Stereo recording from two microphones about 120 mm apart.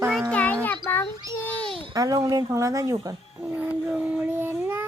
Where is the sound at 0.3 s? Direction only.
10° left (ahead or behind).